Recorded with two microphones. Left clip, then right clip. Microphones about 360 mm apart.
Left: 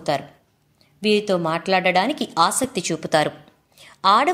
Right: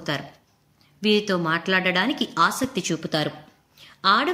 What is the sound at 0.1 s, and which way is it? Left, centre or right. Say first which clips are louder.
A woman's voice: left 6 dB; centre.